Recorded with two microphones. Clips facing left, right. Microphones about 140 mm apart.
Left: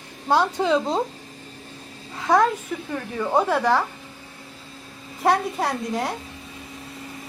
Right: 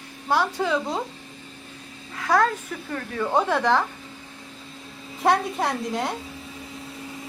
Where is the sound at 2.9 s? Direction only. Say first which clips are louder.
Left 1 dB; 10° left (ahead or behind).